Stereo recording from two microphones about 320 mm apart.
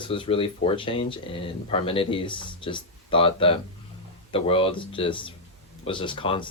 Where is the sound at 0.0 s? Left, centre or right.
Centre.